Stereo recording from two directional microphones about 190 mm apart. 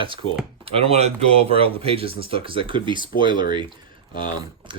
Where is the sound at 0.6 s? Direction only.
30° right (ahead or behind).